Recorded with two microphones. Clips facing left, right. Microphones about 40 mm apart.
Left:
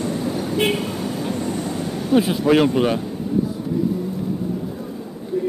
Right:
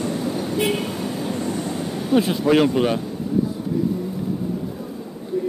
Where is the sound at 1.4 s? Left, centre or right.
Centre.